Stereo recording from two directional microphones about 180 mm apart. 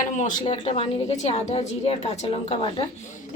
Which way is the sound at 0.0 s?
45° left (ahead or behind).